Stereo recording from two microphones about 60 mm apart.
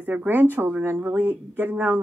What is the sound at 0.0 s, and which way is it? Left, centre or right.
A woman's voice, right.